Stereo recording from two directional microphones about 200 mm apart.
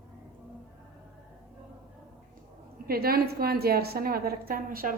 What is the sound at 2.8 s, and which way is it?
A woman's voice, 50° right (ahead or behind).